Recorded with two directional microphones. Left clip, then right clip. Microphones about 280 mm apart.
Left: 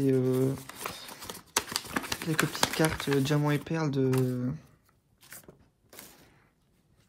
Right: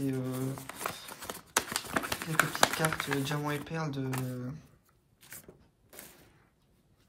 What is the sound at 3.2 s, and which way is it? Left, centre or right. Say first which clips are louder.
Speech: left 5 dB; left.